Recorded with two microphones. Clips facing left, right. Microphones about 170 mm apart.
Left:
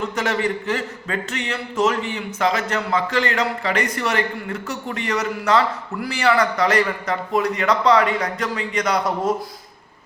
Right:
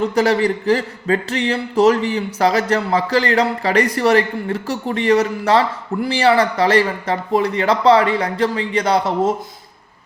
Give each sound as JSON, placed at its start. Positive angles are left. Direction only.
{"t": 0.1, "sound": "speech", "side_deg": -35}